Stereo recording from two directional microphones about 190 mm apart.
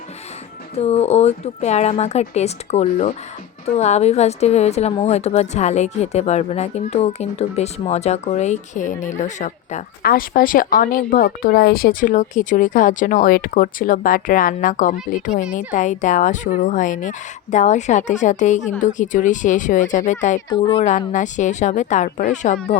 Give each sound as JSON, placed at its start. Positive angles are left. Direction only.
{"t": 0.8, "sound": "a woman's voice", "side_deg": 35}
{"t": 10.0, "sound": "a woman's voice", "side_deg": 50}
{"t": 20.5, "sound": "speech", "side_deg": 25}
{"t": 21.1, "sound": "a woman's voice", "side_deg": 40}